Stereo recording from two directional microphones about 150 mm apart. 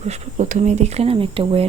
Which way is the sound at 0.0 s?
50° right (ahead or behind).